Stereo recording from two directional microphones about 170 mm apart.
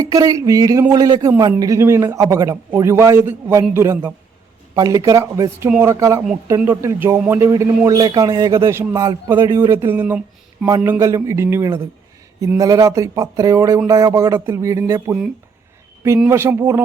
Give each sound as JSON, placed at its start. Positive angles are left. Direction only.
{"t": 0.0, "sound": "a man's voice", "side_deg": -20}